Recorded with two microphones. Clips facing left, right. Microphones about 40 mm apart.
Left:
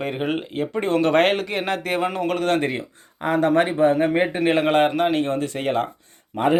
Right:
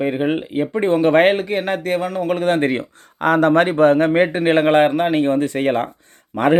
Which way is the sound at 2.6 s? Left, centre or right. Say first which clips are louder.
Right 6 dB; right.